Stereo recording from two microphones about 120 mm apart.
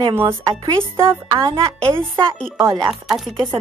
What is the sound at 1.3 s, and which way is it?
Speech, 50° right (ahead or behind).